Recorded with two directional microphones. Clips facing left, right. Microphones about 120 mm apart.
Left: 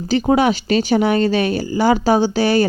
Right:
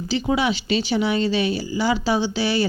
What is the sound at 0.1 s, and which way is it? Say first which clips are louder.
Speech: left 6 dB; 50° left (ahead or behind).